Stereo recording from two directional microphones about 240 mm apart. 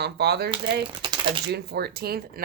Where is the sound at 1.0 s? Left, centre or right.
Centre.